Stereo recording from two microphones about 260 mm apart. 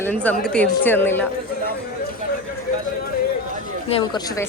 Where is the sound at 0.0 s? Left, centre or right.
Centre.